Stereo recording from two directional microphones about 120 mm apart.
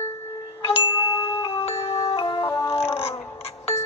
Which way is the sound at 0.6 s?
55° left (ahead or behind).